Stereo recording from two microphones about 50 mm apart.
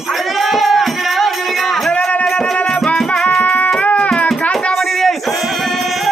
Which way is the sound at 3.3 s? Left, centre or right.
Left.